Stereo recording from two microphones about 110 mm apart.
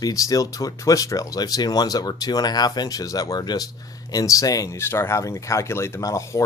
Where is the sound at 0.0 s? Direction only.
35° left (ahead or behind).